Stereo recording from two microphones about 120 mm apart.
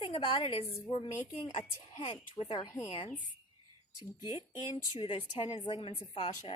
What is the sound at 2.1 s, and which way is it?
Speech, 40° left (ahead or behind).